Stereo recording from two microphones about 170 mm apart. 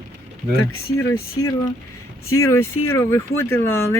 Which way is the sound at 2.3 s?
15° left (ahead or behind).